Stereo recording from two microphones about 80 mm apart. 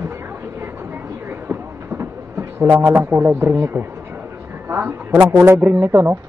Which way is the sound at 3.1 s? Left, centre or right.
Right.